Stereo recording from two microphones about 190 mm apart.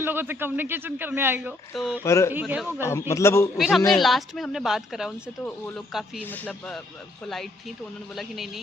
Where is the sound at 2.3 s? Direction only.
5° right (ahead or behind).